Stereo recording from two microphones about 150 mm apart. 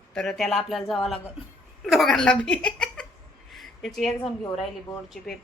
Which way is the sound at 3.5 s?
Centre (ahead or behind).